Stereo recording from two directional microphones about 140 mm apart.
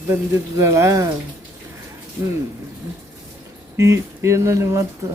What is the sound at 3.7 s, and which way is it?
Speech, 20° right (ahead or behind).